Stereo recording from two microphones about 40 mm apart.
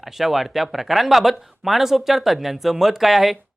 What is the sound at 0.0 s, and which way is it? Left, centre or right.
Speech, centre.